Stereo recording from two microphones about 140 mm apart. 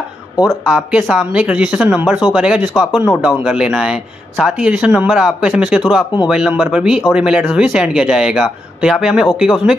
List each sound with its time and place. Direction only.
0.5 s speech: 5° right (ahead or behind)